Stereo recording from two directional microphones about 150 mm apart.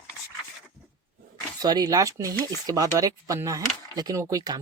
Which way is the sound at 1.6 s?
25° right (ahead or behind).